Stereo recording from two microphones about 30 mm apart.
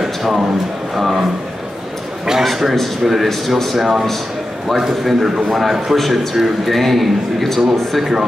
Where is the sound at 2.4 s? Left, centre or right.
Centre.